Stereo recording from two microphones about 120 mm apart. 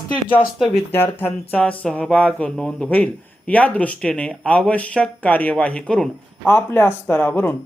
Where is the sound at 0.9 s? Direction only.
15° left (ahead or behind).